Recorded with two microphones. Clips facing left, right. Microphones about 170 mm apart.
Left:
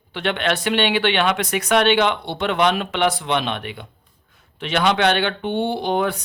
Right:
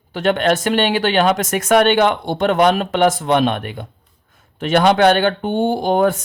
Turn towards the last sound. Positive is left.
turn(degrees=-45)  # may be behind; listen again after turning